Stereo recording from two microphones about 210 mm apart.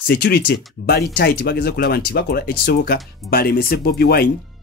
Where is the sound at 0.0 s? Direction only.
45° left (ahead or behind).